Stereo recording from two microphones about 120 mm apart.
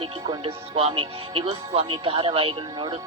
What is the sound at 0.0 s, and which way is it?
Speech, 55° right (ahead or behind).